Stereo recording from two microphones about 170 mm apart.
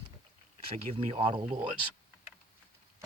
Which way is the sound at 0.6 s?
35° right (ahead or behind).